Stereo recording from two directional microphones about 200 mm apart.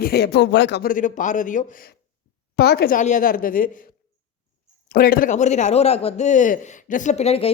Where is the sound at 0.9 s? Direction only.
40° left (ahead or behind).